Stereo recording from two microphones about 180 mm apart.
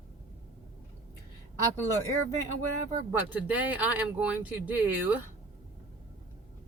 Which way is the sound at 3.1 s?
10° right (ahead or behind).